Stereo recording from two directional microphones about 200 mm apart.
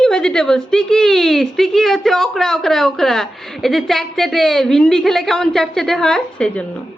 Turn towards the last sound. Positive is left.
turn(degrees=5)  # may be behind; listen again after turning